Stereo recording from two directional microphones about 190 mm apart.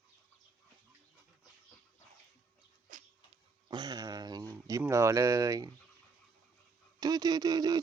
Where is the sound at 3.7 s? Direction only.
20° right (ahead or behind).